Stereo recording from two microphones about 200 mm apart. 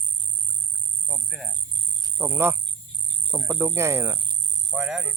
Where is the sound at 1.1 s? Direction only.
Centre (ahead or behind).